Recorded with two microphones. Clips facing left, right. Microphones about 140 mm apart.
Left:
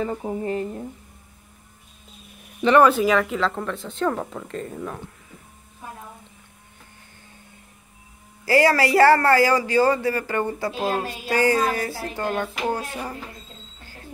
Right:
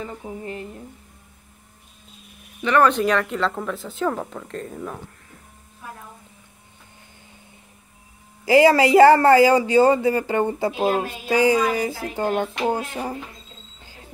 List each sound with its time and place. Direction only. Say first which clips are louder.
0.0 s a sound: left 6 dB; 40° left (ahead or behind)
2.8 s speech: right 1 dB; 5° left (ahead or behind)
8.5 s speech: right 4 dB; 20° right (ahead or behind)